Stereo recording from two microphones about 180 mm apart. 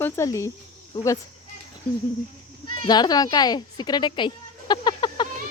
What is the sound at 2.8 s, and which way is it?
Speech, 25° left (ahead or behind).